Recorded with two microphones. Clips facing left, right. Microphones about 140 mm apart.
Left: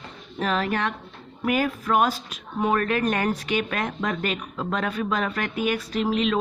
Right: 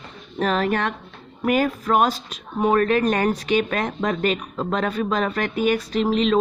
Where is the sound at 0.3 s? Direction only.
40° right (ahead or behind).